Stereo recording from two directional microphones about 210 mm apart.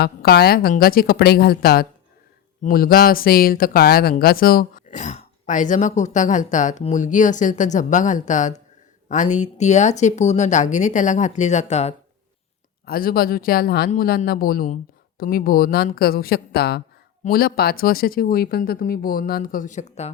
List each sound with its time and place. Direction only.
0.0 s speech: 45° left (ahead or behind); by 11.9 s 30° left (ahead or behind)
12.8 s speech: 45° left (ahead or behind)